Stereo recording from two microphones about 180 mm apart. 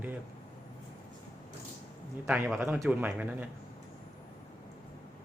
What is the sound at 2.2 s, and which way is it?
Speech, 10° right (ahead or behind).